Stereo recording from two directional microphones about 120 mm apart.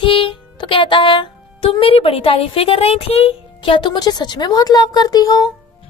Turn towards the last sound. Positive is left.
turn(degrees=30)  # may be behind; listen again after turning